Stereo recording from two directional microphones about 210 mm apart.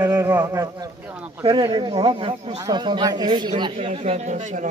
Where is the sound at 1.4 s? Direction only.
20° right (ahead or behind).